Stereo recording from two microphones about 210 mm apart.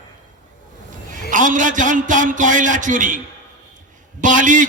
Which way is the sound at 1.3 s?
40° right (ahead or behind).